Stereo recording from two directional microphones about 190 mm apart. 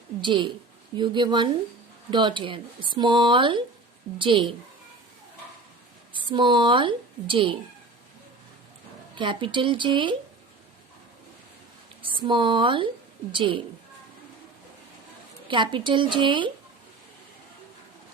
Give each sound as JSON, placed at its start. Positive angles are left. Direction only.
{"t": 0.2, "sound": "speech", "side_deg": -25}
{"t": 6.1, "sound": "a woman's voice", "side_deg": -25}
{"t": 9.1, "sound": "speech", "side_deg": -25}
{"t": 12.0, "sound": "speech", "side_deg": -25}
{"t": 15.4, "sound": "speech", "side_deg": -25}